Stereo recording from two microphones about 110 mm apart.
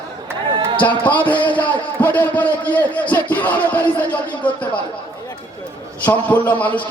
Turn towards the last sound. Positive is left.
turn(degrees=15)  # may be behind; listen again after turning